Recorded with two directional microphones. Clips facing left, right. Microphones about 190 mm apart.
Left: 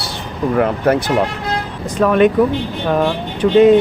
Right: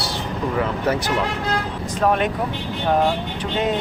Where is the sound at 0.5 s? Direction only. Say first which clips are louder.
Left 8 dB; 60° left (ahead or behind).